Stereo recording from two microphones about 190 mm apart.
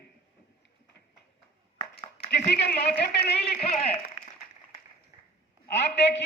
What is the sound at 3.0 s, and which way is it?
Speech, 55° left (ahead or behind).